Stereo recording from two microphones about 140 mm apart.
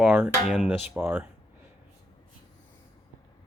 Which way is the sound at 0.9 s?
15° right (ahead or behind).